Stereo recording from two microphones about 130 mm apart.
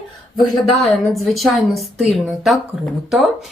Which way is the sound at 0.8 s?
Centre (ahead or behind).